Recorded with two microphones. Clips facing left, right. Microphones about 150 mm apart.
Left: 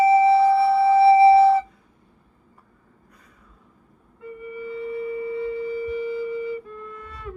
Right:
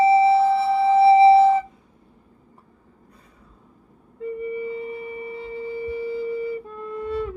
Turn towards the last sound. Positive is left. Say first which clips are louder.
# right 13 dB
turn(degrees=-25)  # may be behind; listen again after turning